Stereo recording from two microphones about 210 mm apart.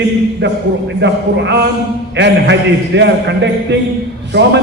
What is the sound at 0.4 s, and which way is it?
A man's voice, 60° right (ahead or behind).